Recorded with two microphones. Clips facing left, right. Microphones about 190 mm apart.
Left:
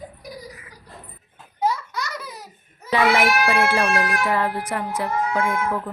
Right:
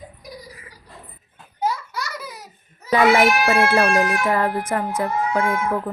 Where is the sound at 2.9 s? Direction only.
45° right (ahead or behind).